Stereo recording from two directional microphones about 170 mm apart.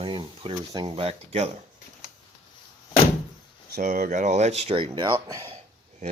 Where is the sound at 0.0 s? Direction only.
30° right (ahead or behind).